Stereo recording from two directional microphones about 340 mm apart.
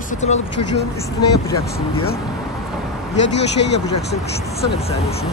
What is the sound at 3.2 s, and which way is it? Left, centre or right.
Speech, left.